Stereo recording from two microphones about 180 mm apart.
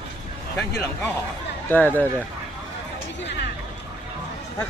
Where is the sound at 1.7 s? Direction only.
10° left (ahead or behind).